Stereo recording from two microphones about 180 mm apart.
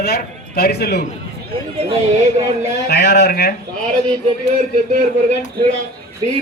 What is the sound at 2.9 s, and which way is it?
Speech, 65° left (ahead or behind).